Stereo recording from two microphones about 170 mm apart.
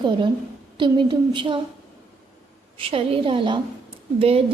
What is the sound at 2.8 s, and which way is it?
A woman's voice, 35° right (ahead or behind).